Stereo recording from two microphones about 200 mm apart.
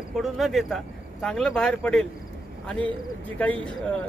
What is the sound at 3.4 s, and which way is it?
Speech, 5° left (ahead or behind).